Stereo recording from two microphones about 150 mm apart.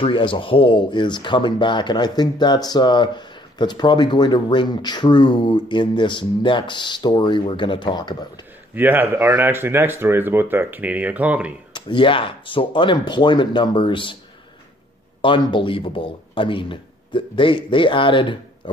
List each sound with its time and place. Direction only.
0.0 s speech: 35° left (ahead or behind)
8.7 s speech: 10° right (ahead or behind)
11.7 s speech: 35° left (ahead or behind)
15.2 s speech: 35° left (ahead or behind)